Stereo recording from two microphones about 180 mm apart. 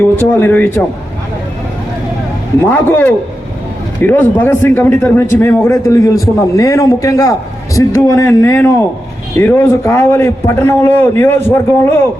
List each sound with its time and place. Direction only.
0.0 s a man's voice: 10° left (ahead or behind)
2.6 s a man's voice: 10° left (ahead or behind)